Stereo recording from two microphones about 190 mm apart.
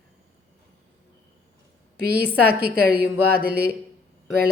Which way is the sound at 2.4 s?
55° right (ahead or behind).